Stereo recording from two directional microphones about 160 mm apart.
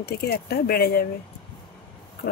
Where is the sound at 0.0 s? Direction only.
80° left.